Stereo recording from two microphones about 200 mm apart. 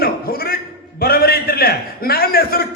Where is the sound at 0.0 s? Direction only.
50° left (ahead or behind).